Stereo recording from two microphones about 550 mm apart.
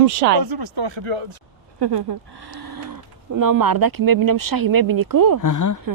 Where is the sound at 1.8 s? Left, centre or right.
Right.